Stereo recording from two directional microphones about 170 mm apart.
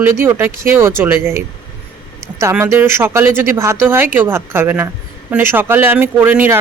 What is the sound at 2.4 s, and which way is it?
Speech, 15° right (ahead or behind).